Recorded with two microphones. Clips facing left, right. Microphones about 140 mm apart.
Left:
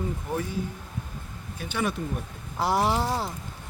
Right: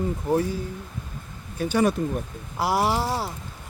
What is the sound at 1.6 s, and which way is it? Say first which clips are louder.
Speech: right 8 dB; 40° right (ahead or behind).